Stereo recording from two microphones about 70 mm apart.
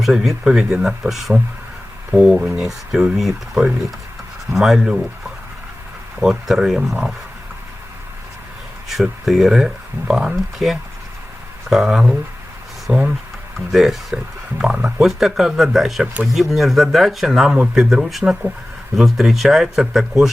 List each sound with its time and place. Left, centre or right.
0.0 s speech: centre
6.2 s speech: centre
8.9 s speech: centre
13.7 s speech: centre
15.0 s speech: centre